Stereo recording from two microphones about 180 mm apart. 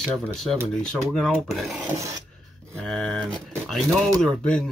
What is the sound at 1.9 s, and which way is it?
Filing, 20° right (ahead or behind).